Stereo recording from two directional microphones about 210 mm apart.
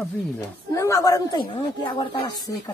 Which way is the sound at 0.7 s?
15° left (ahead or behind).